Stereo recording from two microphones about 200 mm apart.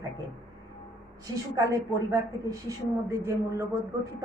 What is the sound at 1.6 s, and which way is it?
Speech, 15° right (ahead or behind).